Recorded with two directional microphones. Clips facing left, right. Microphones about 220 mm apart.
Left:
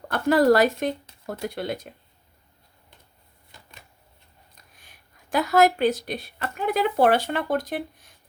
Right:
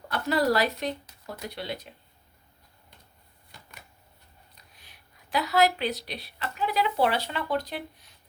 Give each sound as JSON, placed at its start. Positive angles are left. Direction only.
{"t": 0.1, "sound": "speech", "side_deg": 50}
{"t": 4.5, "sound": "a woman's voice", "side_deg": 50}